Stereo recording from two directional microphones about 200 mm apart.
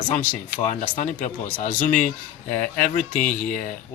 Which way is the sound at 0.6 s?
25° left (ahead or behind).